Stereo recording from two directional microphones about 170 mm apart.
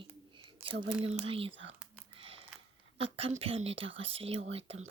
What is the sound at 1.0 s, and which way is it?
Speech, 35° right (ahead or behind).